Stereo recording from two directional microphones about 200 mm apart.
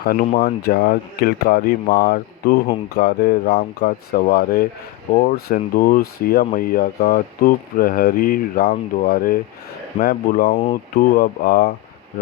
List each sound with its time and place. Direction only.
0.0 s speech: 45° left (ahead or behind)
6.4 s speech: 40° left (ahead or behind)